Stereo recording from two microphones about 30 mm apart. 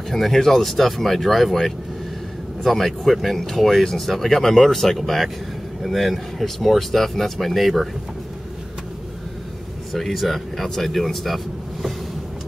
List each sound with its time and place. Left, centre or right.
0.1 s speech: centre
9.9 s speech: centre